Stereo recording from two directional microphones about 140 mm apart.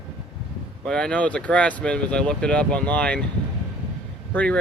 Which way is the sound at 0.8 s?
5° left (ahead or behind).